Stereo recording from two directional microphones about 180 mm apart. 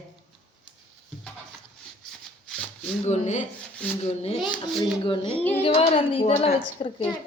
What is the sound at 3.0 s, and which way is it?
Speech, 40° left (ahead or behind).